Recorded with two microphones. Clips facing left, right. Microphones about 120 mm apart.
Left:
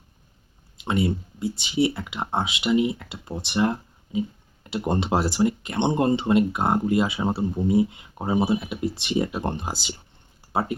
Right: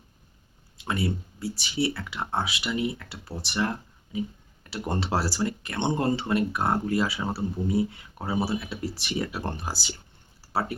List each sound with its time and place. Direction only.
0.8 s speech: 20° left (ahead or behind)